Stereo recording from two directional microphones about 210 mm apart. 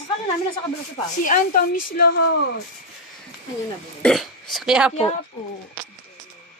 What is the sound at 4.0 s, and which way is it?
Speech, centre (ahead or behind).